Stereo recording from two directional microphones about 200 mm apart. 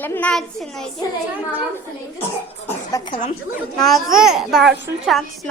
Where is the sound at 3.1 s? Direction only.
25° left (ahead or behind).